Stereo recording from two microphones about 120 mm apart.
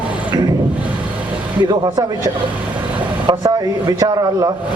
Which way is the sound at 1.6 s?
35° right (ahead or behind).